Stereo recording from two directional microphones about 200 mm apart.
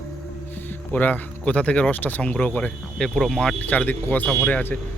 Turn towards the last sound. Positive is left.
turn(degrees=10)  # may be behind; listen again after turning